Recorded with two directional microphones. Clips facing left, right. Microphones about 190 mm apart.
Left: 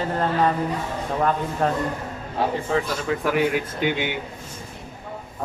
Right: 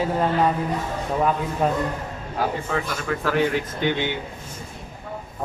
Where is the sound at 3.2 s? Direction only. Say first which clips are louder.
Right 1 dB; 10° left (ahead or behind).